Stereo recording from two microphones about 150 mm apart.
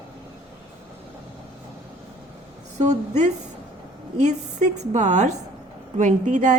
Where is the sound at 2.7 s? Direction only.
50° right (ahead or behind).